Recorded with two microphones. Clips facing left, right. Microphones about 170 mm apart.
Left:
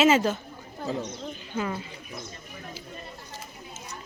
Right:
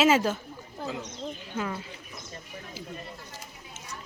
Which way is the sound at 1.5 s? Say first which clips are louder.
Left 3 dB; centre (ahead or behind).